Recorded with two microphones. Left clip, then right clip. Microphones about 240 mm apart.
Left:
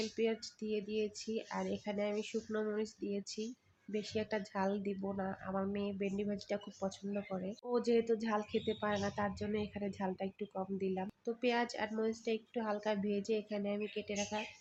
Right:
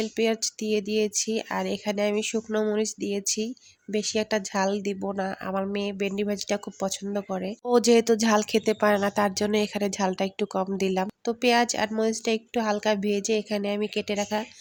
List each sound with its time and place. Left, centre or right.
0.2 s speech: right